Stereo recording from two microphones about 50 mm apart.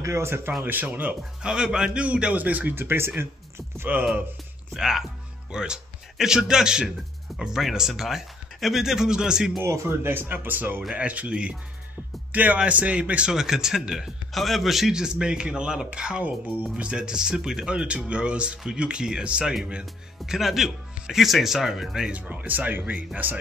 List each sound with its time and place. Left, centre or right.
0.0 s speech: right
0.7 s speech: right
1.4 s speech: centre
2.3 s speech: right
2.7 s speech: right
4.7 s a man's voice: centre
9.6 s speech: right
10.8 s speech: right
13.3 s speech: centre
14.3 s speech: centre
22.1 s speech: right